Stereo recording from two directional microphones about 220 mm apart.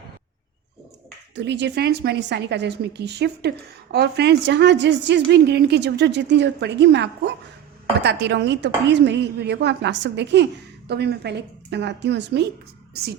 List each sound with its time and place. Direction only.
1.4 s a woman's voice: 50° right (ahead or behind)